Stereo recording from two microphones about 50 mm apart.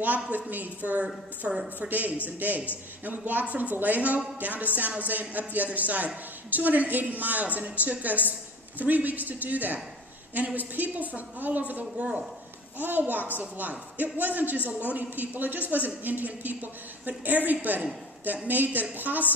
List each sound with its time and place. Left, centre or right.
0.0 s a woman's voice: right
11.8 s speech: right
12.7 s a woman's voice: right